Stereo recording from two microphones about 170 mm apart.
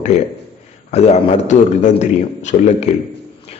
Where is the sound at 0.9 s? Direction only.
40° left (ahead or behind).